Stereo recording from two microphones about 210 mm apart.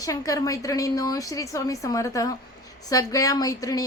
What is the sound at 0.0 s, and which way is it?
A woman's voice, 15° left (ahead or behind).